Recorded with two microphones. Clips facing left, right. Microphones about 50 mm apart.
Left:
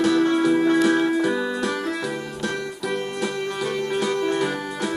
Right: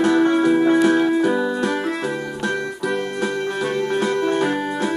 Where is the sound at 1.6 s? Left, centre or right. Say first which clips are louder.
Right 3 dB; right.